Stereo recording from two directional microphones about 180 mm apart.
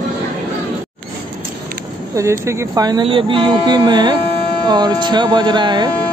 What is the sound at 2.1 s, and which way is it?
Speech, 15° right (ahead or behind).